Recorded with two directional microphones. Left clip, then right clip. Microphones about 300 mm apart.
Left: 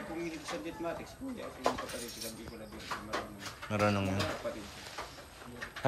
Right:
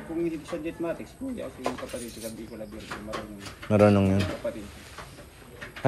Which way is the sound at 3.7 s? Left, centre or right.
Centre.